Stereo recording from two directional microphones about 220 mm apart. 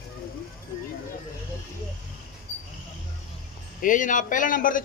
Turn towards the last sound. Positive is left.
turn(degrees=40)  # may be behind; listen again after turning